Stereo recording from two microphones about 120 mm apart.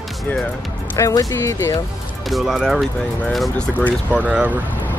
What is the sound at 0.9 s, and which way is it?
Speech, 25° left (ahead or behind).